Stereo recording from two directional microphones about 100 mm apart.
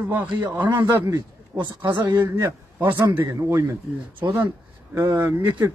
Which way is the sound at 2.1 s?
25° right (ahead or behind).